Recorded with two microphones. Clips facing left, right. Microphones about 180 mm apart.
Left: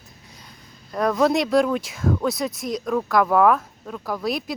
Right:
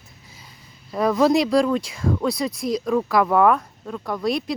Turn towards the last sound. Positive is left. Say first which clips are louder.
# right 2 dB
turn(degrees=0)  # may be behind; listen again after turning